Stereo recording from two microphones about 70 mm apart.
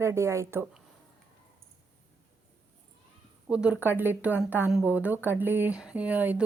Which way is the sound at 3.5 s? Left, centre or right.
Centre.